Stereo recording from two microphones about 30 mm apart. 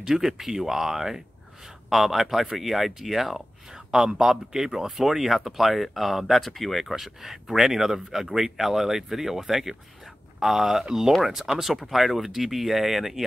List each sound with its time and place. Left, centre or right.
0.0 s speech: centre
3.7 s a man's voice: right; by 7.0 s centre
7.0 s speech: centre